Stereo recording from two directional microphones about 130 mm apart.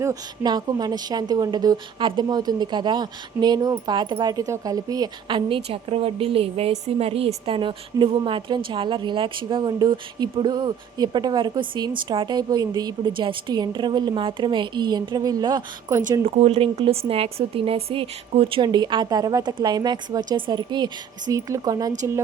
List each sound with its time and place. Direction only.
0.0 s a woman's voice: 30° right (ahead or behind)
5.3 s a woman's voice: 45° right (ahead or behind)
16.2 s a woman's voice: 55° right (ahead or behind)
18.6 s a woman's voice: 35° right (ahead or behind)